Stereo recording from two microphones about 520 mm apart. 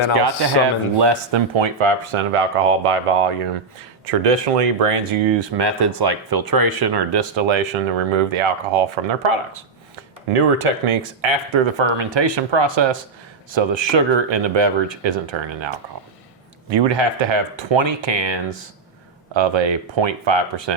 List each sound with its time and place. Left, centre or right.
0.9 s speech: right
4.0 s speech: right
10.3 s speech: right